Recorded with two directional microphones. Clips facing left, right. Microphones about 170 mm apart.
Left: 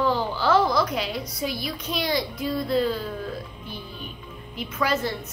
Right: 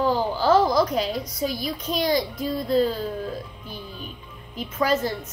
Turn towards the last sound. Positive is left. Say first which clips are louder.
# right 2 dB
turn(degrees=-40)  # may be behind; listen again after turning